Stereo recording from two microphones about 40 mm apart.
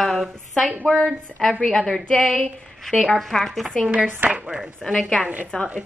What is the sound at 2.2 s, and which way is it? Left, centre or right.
Speech, centre.